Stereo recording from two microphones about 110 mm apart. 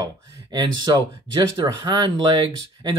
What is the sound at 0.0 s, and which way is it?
Speech, 40° right (ahead or behind).